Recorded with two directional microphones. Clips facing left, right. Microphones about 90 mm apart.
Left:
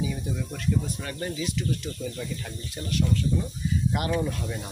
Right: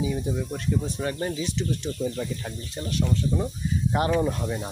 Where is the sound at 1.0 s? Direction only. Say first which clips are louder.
Right 3 dB; 25° right (ahead or behind).